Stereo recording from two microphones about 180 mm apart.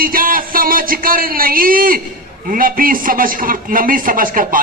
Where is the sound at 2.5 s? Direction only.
50° right (ahead or behind).